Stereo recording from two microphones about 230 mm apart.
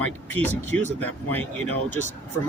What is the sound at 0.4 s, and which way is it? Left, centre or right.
Speech, right.